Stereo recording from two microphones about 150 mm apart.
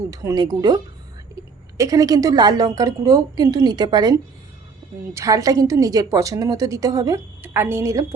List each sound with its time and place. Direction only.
0.1 s a woman's voice: 20° right (ahead or behind)
1.8 s a woman's voice: 25° right (ahead or behind)